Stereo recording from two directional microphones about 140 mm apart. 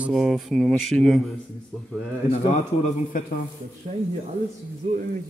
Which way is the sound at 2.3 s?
55° left (ahead or behind).